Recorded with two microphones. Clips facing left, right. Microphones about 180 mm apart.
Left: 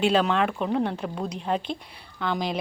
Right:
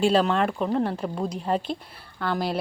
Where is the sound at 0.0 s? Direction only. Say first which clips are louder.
Right 1 dB; centre (ahead or behind).